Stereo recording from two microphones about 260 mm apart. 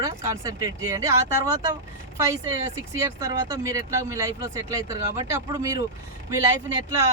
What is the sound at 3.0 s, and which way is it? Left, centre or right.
Speech, centre.